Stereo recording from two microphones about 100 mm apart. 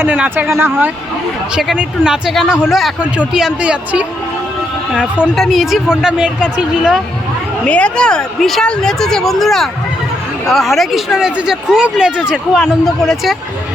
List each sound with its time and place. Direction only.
0.0 s a man's voice: 15° right (ahead or behind)
1.5 s a man's voice: 10° right (ahead or behind)
5.3 s speech: centre (ahead or behind)
7.6 s speech: 10° left (ahead or behind)